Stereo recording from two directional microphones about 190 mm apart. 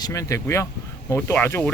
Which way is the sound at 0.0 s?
15° left (ahead or behind).